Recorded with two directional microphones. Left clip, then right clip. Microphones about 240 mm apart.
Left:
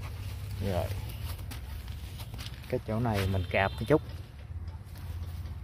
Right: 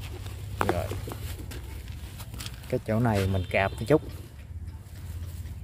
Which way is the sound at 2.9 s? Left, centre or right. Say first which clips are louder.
Right 7 dB; right.